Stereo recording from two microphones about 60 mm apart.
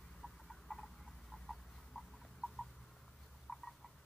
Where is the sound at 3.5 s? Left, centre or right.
Centre.